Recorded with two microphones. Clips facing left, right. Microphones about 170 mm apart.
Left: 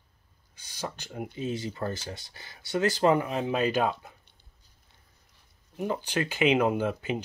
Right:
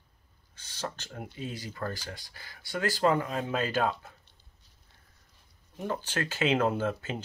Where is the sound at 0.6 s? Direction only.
10° left (ahead or behind).